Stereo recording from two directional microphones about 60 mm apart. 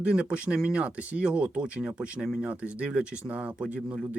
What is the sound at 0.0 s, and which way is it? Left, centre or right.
Speech, centre.